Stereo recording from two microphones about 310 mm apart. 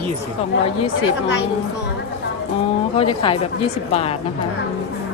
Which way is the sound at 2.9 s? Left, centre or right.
Centre.